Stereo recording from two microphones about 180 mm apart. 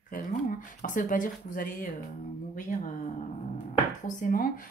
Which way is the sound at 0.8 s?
50° left (ahead or behind).